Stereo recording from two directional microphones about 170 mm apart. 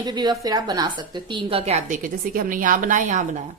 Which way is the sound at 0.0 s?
25° right (ahead or behind).